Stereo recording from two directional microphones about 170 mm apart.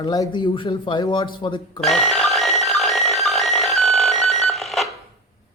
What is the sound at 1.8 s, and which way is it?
Alarm clock, centre (ahead or behind).